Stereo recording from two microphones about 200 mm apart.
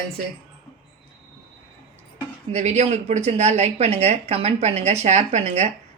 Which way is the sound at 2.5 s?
35° right (ahead or behind).